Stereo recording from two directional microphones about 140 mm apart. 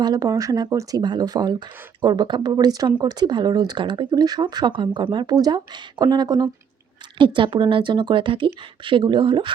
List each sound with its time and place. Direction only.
0.0 s speech: 25° right (ahead or behind)